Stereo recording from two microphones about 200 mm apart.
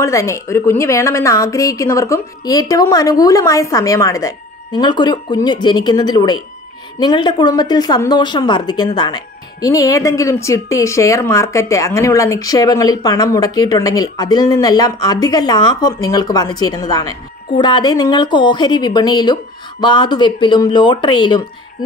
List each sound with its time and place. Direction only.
0.0 s a woman's voice: 15° left (ahead or behind)